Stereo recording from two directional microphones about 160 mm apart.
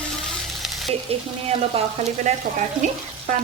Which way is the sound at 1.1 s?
40° right (ahead or behind).